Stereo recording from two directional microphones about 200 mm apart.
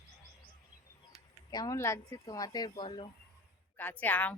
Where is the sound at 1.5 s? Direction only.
15° left (ahead or behind).